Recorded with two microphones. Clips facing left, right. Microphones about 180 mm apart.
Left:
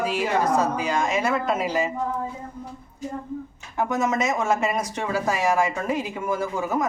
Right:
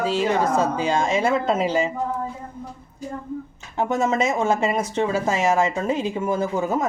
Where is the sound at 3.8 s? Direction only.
25° right (ahead or behind).